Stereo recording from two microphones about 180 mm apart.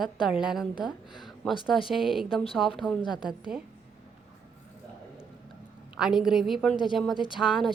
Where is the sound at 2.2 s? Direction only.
30° left (ahead or behind).